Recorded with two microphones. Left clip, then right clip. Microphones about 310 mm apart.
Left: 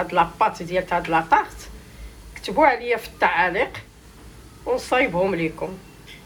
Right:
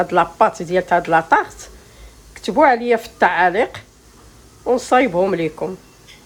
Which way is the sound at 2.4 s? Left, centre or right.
Right.